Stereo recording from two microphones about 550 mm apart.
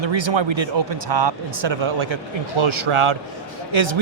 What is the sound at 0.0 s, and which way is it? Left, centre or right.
A man's voice, right.